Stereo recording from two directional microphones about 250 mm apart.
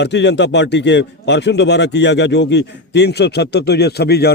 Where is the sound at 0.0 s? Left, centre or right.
Left.